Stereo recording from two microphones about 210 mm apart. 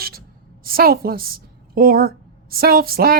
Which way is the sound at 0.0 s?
45° right (ahead or behind).